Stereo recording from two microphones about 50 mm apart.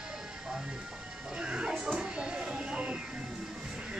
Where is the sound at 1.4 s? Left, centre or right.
Centre.